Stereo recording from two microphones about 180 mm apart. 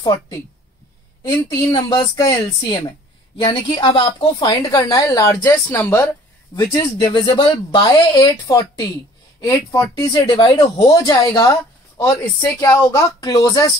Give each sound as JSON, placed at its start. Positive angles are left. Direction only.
{"t": 0.0, "sound": "a woman's voice", "side_deg": 20}
{"t": 1.7, "sound": "a woman's voice", "side_deg": 20}